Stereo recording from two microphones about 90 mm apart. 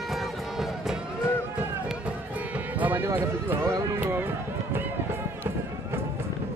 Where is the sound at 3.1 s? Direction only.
25° right (ahead or behind).